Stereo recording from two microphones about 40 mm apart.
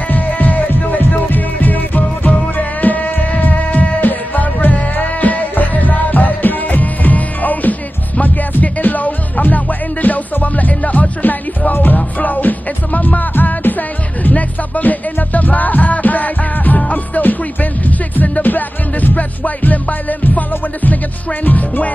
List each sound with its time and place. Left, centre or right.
0.1 s music: left